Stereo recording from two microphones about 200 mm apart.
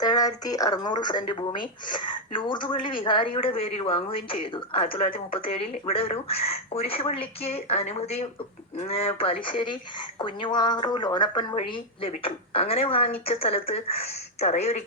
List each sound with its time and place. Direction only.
0.0 s a woman's voice: 20° left (ahead or behind)